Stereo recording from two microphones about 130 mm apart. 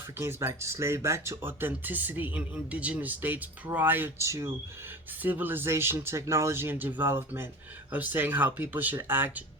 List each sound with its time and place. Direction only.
0.2 s speech: 20° right (ahead or behind)